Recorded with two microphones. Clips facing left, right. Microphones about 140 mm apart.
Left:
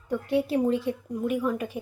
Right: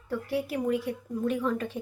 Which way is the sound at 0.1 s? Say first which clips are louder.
Left 5 dB; 20° left (ahead or behind).